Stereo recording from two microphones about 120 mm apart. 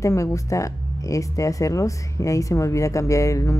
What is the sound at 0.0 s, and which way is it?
Speech, 25° left (ahead or behind).